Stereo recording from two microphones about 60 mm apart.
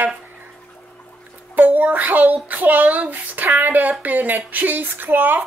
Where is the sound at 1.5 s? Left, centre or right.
Right.